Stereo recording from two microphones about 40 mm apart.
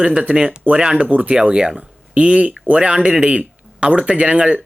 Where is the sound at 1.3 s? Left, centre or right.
Right.